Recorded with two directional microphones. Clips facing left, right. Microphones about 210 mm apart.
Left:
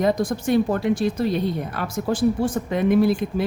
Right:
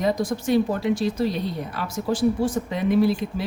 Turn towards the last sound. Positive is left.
turn(degrees=50)  # may be behind; listen again after turning